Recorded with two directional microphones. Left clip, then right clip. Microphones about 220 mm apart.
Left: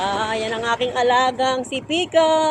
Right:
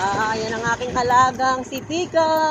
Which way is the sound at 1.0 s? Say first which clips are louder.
Right 2 dB; 25° left (ahead or behind).